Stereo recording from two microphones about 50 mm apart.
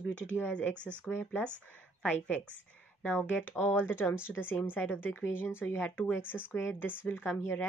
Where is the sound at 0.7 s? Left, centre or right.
Right.